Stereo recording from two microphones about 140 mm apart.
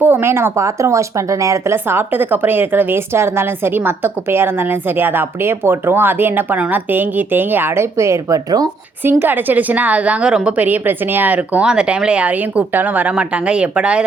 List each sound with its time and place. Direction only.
0.0 s speech: 15° right (ahead or behind)
9.0 s speech: 15° right (ahead or behind)